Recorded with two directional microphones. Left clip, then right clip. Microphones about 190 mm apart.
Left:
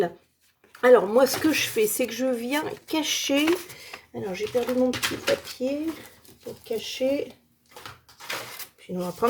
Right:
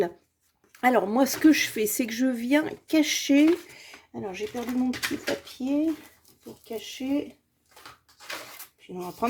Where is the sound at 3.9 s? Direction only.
35° left (ahead or behind).